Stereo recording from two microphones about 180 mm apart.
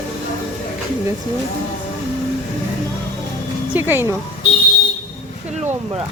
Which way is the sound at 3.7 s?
10° right (ahead or behind).